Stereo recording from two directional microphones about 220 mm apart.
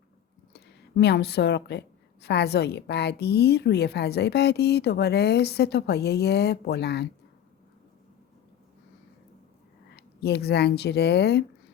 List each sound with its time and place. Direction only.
0.5 s a woman's voice: 50° left (ahead or behind)
9.9 s speech: 50° left (ahead or behind)